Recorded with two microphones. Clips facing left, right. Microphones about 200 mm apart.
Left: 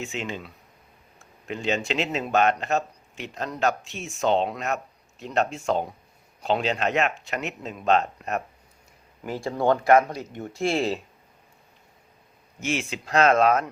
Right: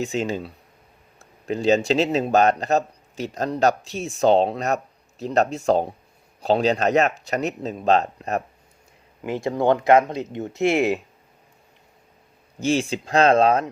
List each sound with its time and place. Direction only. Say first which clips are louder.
0.0 s speech: right 7 dB; 40° right (ahead or behind)
9.2 s speech: right 3 dB; 20° right (ahead or behind)
12.5 s speech: right 7 dB; 30° right (ahead or behind)